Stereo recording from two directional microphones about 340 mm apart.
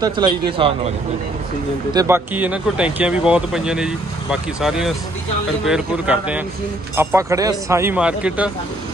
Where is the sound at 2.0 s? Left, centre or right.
Centre.